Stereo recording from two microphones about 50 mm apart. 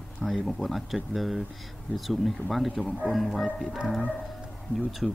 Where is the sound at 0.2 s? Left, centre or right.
Centre.